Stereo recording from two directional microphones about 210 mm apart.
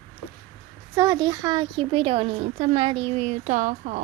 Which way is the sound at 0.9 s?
15° right (ahead or behind).